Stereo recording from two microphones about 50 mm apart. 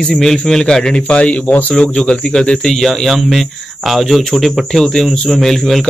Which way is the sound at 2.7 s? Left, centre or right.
Centre.